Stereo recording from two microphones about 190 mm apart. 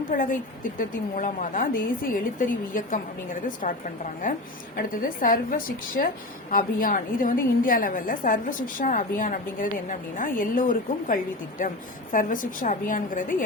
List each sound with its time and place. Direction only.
0.1 s a woman's voice: 45° left (ahead or behind)